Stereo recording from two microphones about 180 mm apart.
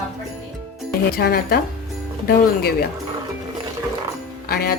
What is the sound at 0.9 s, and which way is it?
Speech, 60° left (ahead or behind).